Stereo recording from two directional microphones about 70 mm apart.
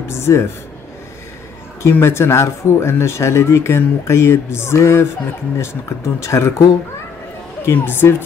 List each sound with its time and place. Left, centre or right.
0.1 s speech: left
1.8 s speech: left
7.6 s speech: left